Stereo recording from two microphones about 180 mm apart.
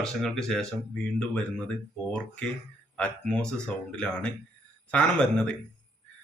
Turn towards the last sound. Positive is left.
turn(degrees=5)  # may be behind; listen again after turning